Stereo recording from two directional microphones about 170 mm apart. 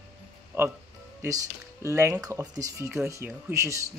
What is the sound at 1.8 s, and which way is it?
Speech, 15° right (ahead or behind).